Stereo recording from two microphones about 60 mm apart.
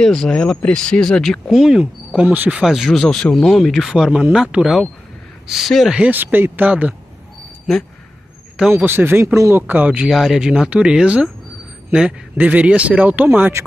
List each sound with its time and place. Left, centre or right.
0.0 s speech: centre
1.5 s speech: centre
2.2 s speech: right
2.6 s speech: centre
2.9 s speech: centre
3.9 s speech: centre
5.5 s speech: centre
6.0 s speech: right
8.7 s speech: right
9.2 s speech: right
9.6 s speech: right
10.0 s speech: centre
12.4 s speech: right